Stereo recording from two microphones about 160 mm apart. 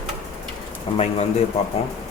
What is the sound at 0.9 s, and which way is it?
Speech, 35° left (ahead or behind).